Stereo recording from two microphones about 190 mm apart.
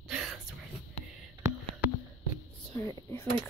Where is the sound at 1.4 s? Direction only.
15° right (ahead or behind).